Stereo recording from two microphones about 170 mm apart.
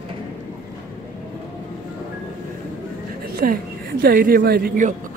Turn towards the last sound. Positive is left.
turn(degrees=-55)  # may be behind; listen again after turning